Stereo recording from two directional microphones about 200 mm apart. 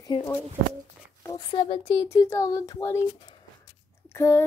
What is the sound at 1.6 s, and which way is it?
Speech, 30° left (ahead or behind).